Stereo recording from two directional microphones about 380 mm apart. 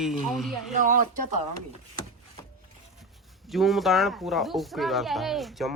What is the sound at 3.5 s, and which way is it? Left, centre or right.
Speech, centre.